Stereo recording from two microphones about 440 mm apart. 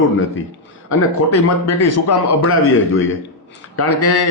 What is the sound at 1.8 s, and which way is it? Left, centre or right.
A man's voice, left.